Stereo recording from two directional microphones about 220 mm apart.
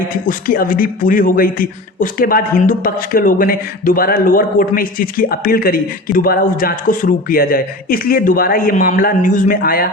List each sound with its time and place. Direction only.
0.3 s speech: 40° left (ahead or behind)